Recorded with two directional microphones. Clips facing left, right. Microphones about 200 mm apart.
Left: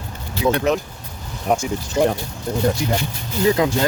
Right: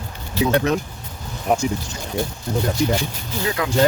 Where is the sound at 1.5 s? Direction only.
Centre (ahead or behind).